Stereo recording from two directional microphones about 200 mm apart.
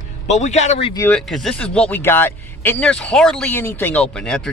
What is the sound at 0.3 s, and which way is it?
Speech, 35° left (ahead or behind).